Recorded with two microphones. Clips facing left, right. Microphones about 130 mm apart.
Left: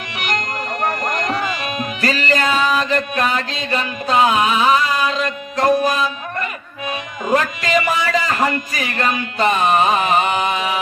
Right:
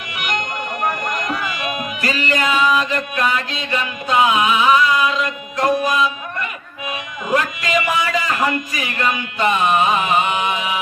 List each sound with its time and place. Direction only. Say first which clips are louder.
0.8 s music: left 1 dB; 35° left (ahead or behind)
2.2 s mantra: right 1 dB; 35° left (ahead or behind)
6.8 s speech: left 3 dB; 35° left (ahead or behind)